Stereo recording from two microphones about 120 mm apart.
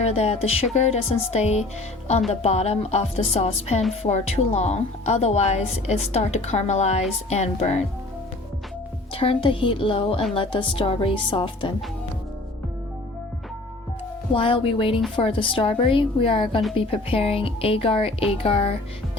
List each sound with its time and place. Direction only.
0.0 s a woman's voice: 65° left (ahead or behind)
9.1 s speech: 50° left (ahead or behind)
14.3 s speech: 45° left (ahead or behind)